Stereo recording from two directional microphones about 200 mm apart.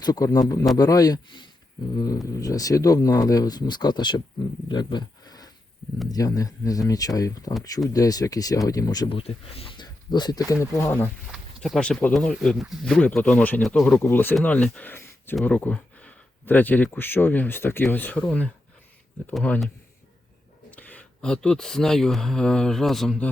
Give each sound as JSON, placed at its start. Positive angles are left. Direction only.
{"t": 0.0, "sound": "speech", "side_deg": 20}
{"t": 11.3, "sound": "speech", "side_deg": 0}